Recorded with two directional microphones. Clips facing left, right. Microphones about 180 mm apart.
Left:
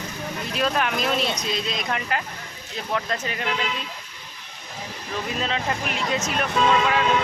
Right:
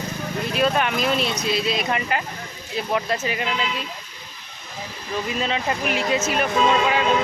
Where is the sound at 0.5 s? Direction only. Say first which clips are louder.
Right 3 dB; centre (ahead or behind).